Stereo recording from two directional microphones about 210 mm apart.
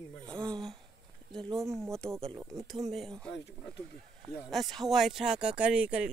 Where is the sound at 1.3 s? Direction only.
Centre (ahead or behind).